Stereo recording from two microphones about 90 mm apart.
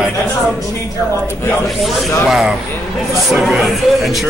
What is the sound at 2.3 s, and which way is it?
Speech, 5° right (ahead or behind).